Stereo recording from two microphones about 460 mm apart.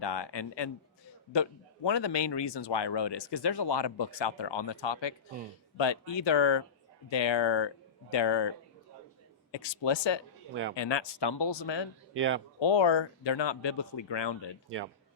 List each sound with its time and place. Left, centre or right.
0.0 s a man's voice: left
10.5 s speech: right
10.8 s a man's voice: left
12.1 s speech: right
12.5 s speech: left